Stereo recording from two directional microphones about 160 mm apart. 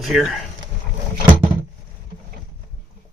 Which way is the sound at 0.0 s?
Centre (ahead or behind).